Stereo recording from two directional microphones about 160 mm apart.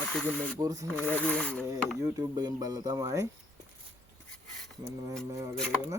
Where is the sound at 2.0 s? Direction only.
25° right (ahead or behind).